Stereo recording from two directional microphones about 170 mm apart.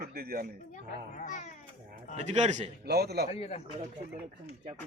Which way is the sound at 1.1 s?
50° left (ahead or behind).